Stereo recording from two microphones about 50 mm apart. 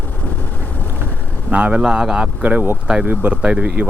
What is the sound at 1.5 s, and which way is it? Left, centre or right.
Speech, right.